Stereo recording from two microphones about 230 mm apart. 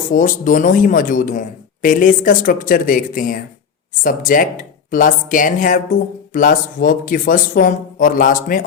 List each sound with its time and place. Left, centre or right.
0.1 s speech: left